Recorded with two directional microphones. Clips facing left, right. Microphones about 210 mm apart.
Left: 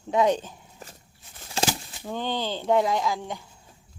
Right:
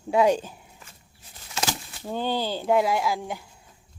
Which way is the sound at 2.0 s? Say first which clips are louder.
Right 2 dB; 10° right (ahead or behind).